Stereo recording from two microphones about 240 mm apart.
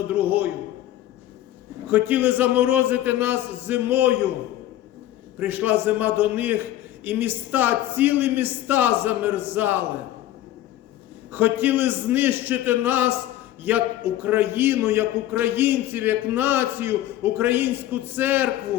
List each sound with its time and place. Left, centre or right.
0.1 s a sound: centre
1.9 s a man's voice: centre
5.4 s a man's voice: centre
11.3 s a man's voice: centre